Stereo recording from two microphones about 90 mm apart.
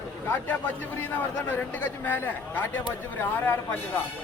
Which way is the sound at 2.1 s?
20° left (ahead or behind).